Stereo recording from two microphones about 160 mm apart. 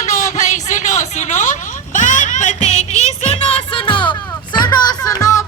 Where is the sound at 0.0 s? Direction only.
50° left (ahead or behind); by 4.2 s 30° left (ahead or behind).